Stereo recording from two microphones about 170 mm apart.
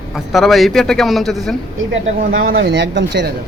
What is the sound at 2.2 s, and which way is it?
Speech, 65° right (ahead or behind).